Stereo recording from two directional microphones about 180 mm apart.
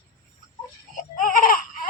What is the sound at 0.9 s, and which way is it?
Baby cry, 50° left (ahead or behind).